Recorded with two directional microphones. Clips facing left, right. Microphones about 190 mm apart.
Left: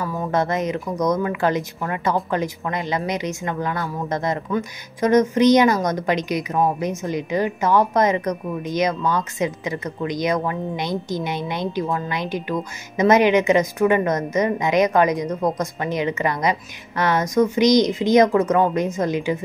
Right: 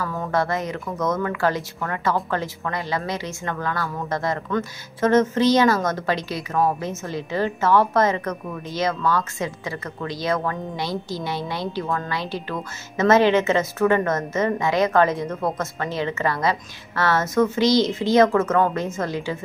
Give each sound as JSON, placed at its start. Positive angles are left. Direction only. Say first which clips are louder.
{"t": 0.0, "sound": "speech", "louder": "left 2 dB", "side_deg": 15}